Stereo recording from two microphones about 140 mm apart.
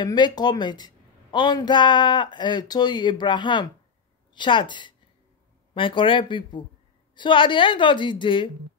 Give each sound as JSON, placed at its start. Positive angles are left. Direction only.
{"t": 0.0, "sound": "speech", "side_deg": 30}